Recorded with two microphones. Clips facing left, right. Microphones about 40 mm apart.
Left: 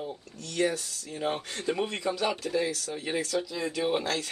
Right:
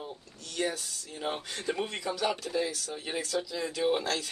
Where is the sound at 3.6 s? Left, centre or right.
Left.